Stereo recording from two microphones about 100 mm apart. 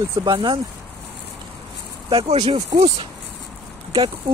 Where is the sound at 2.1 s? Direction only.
80° right.